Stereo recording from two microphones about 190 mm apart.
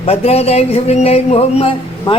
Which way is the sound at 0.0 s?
30° left (ahead or behind).